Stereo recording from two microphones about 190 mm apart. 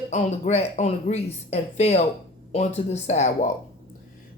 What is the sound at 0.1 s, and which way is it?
Speech, 35° left (ahead or behind).